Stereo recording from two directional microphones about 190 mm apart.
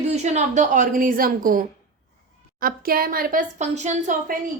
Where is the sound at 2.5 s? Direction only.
50° right (ahead or behind).